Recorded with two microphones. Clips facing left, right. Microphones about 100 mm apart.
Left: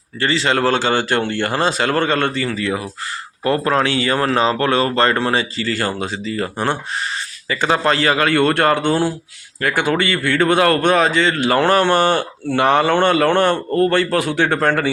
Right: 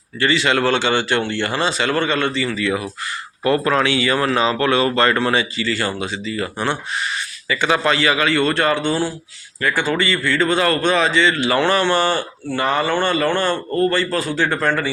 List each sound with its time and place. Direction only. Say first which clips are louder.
0.2 s a man's voice: even; 35° left (ahead or behind); by 14.9 s 55° left (ahead or behind)